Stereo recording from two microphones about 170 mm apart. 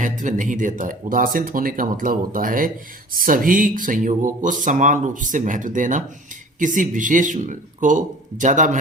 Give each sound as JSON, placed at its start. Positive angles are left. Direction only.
{"t": 0.0, "sound": "speech", "side_deg": -50}